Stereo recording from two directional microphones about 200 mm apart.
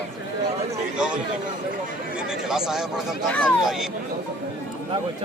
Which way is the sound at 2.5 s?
Centre (ahead or behind).